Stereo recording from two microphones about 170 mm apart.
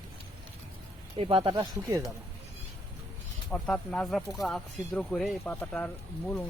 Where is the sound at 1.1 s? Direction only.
35° right (ahead or behind).